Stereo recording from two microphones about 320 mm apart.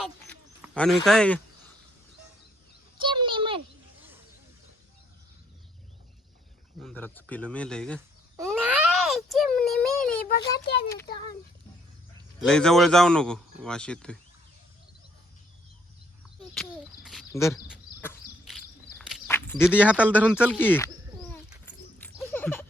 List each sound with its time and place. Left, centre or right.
0.0 s a sound: centre
3.0 s a sound: centre
6.8 s speech: centre
8.4 s baby cry: centre
10.2 s a child's voice: left
10.8 s speech: centre
12.4 s speech: centre
16.4 s speech: centre
17.7 s walk: centre
20.3 s bird: centre